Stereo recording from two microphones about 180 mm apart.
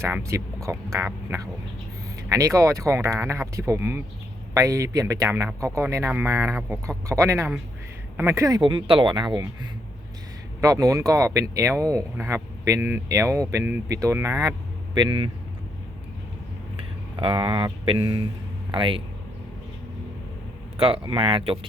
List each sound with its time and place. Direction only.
0.0 s speech: 15° right (ahead or behind)
10.6 s speech: 20° right (ahead or behind)
17.2 s speech: 25° right (ahead or behind)
20.7 s speech: 30° right (ahead or behind)